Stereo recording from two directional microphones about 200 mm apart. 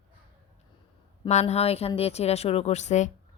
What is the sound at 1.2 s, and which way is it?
A woman's voice, 35° left (ahead or behind).